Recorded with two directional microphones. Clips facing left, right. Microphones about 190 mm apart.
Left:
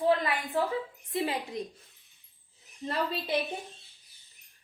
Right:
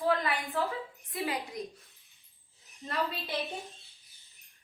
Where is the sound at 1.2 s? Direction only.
25° left (ahead or behind).